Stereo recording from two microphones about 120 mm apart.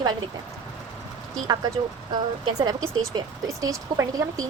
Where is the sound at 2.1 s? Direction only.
35° right (ahead or behind).